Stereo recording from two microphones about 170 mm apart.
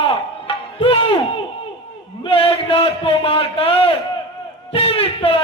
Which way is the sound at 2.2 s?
35° left (ahead or behind).